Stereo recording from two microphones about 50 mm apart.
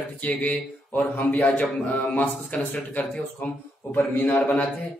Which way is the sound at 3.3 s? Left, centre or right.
Left.